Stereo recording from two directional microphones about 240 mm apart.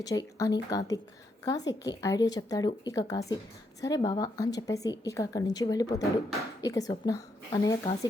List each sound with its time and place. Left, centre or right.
0.0 s a woman's voice: centre